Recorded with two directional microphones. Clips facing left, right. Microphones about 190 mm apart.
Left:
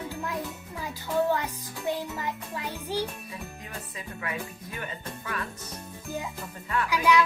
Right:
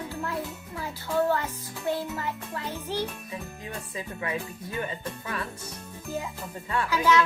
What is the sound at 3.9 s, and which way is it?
Jingle bell, 30° right (ahead or behind).